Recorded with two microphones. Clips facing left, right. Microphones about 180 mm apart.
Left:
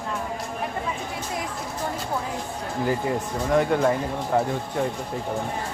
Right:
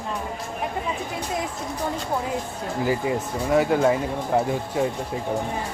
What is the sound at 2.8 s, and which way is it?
Speech, 5° right (ahead or behind).